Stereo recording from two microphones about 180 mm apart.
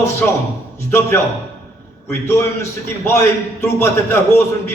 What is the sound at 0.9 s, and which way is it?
A man's voice, 15° left (ahead or behind).